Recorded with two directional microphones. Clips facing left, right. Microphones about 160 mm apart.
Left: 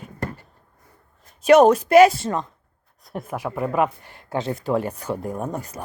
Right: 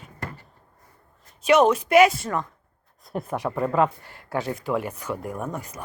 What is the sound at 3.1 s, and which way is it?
Speech, centre (ahead or behind).